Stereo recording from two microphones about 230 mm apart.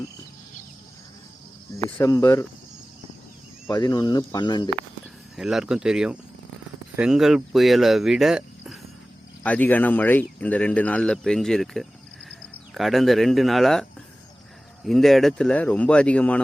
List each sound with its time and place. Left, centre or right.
1.7 s speech: centre
3.7 s speech: centre
5.4 s speech: centre
14.8 s speech: centre